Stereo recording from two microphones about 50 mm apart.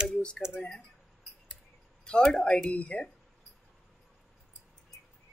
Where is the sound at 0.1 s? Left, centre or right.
Centre.